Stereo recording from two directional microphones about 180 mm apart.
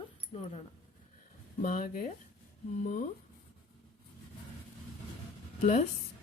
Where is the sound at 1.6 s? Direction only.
45° left (ahead or behind).